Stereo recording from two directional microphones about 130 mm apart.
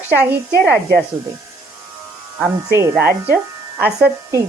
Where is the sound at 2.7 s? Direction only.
20° right (ahead or behind).